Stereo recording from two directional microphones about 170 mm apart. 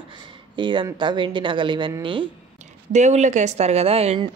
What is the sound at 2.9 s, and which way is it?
Speech, 45° right (ahead or behind).